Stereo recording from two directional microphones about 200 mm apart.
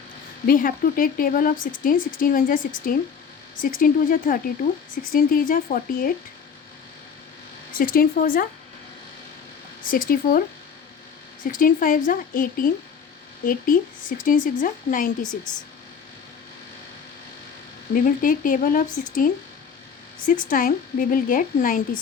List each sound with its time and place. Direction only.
0.4 s a woman's voice: 45° left (ahead or behind)
7.7 s a woman's voice: 45° left (ahead or behind)
9.8 s a woman's voice: 45° left (ahead or behind)
11.4 s a woman's voice: 45° left (ahead or behind)
17.9 s a woman's voice: 45° left (ahead or behind)